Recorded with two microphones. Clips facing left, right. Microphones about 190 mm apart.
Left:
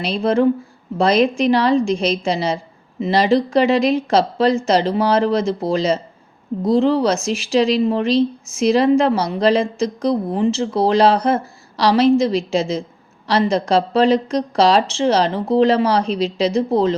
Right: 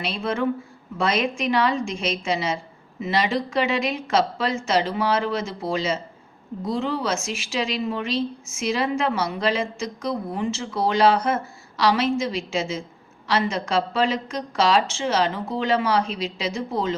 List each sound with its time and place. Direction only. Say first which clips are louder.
0.0 s speech: left 8 dB; 35° left (ahead or behind)